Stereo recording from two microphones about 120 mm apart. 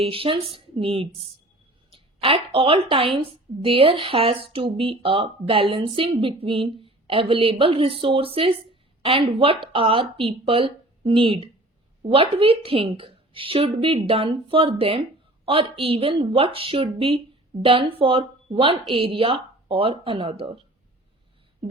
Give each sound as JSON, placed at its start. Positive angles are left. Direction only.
{"t": 0.0, "sound": "a woman's voice", "side_deg": -50}